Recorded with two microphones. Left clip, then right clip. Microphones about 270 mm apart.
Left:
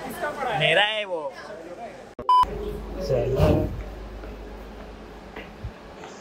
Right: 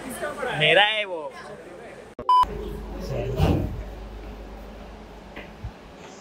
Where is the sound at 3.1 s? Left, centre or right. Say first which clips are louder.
Left 5 dB; centre.